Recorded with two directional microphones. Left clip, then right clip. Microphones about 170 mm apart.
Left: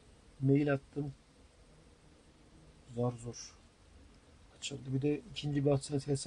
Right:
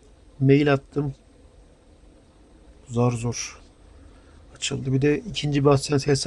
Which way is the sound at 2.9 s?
40° right (ahead or behind).